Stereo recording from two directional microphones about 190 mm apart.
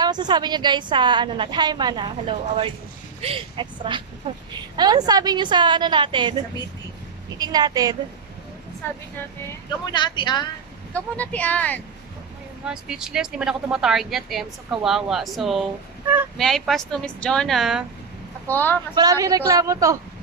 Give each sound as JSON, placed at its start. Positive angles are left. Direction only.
{"t": 0.0, "sound": "a woman's voice", "side_deg": -20}
{"t": 7.3, "sound": "a woman's voice", "side_deg": -20}
{"t": 9.9, "sound": "speech", "side_deg": 25}
{"t": 10.9, "sound": "speech", "side_deg": 10}
{"t": 12.6, "sound": "speech", "side_deg": -5}
{"t": 18.5, "sound": "speech", "side_deg": 10}
{"t": 18.9, "sound": "a woman's voice", "side_deg": -20}